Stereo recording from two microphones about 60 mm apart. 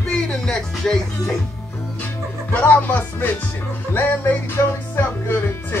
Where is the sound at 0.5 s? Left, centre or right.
Centre.